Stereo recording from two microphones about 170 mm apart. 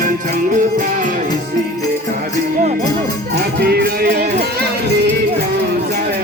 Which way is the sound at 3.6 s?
65° right (ahead or behind).